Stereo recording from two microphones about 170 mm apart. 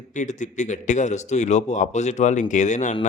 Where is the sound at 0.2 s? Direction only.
45° left (ahead or behind).